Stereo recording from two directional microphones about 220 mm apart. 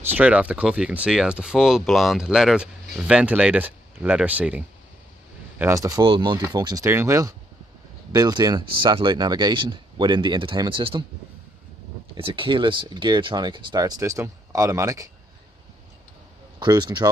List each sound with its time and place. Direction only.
0.0 s speech: 5° right (ahead or behind); by 11.1 s 25° right (ahead or behind)
12.2 s speech: 25° right (ahead or behind)
16.5 s speech: 20° right (ahead or behind)